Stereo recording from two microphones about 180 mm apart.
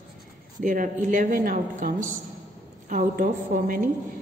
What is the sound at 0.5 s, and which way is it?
A woman's voice, 45° right (ahead or behind).